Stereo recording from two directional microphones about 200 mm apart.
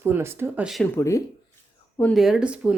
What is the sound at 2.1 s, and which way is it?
Speech, centre (ahead or behind).